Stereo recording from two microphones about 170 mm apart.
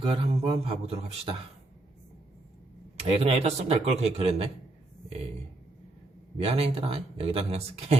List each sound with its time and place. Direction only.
0.0 s speech: 35° right (ahead or behind)
3.0 s speech: 35° right (ahead or behind)
6.3 s speech: 35° right (ahead or behind)